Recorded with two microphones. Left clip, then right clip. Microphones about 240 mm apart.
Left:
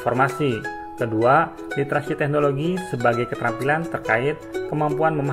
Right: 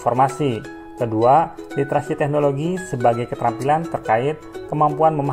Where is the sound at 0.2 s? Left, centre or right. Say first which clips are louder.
Right 2 dB; right.